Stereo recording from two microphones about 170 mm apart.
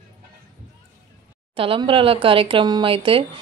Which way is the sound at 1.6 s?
30° right (ahead or behind).